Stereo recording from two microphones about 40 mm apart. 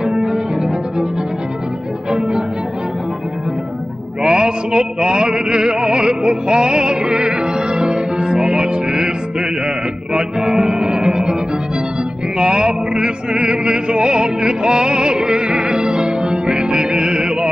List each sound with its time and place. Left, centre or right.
0.3 s cello: right
2.1 s music: centre
4.2 s chant: right
10.1 s music: centre
12.4 s music: right